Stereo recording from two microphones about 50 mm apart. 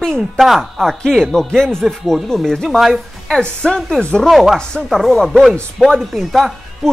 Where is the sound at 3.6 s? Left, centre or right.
Centre.